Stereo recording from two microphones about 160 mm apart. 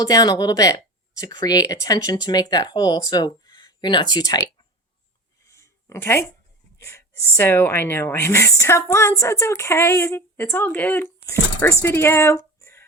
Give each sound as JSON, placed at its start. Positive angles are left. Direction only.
{"t": 0.0, "sound": "speech", "side_deg": 25}
{"t": 5.5, "sound": "a sound", "side_deg": 20}
{"t": 6.7, "sound": "speech", "side_deg": 15}